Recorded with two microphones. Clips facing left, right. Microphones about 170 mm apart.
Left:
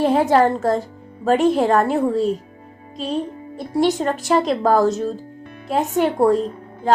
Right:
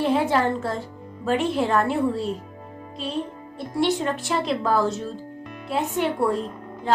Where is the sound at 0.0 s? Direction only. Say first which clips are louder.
Left 6 dB; 40° left (ahead or behind).